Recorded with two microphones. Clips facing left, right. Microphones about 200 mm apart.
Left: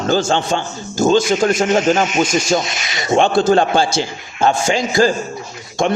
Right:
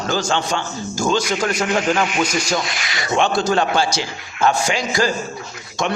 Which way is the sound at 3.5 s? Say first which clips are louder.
Left 4 dB; 30° left (ahead or behind).